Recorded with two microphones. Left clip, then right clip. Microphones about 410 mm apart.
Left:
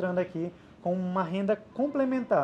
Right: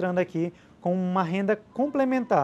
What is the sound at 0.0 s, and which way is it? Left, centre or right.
Speech, right.